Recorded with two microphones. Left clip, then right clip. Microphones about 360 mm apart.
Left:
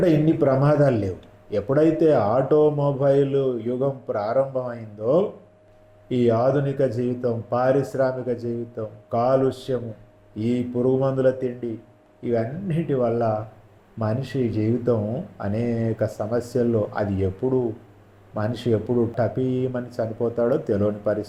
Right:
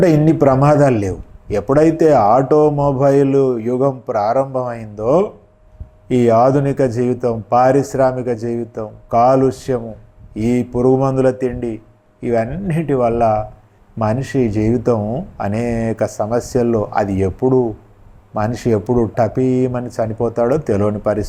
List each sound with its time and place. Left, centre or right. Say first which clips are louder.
0.0 s a man's voice: right 7 dB; right